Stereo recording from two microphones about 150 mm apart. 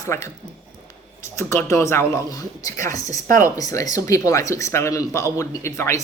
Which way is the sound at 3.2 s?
60° right (ahead or behind).